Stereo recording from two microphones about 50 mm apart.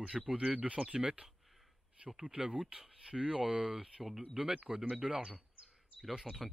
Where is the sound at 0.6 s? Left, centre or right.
Right.